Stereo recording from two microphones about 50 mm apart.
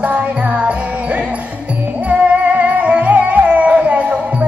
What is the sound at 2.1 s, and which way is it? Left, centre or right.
Music, right.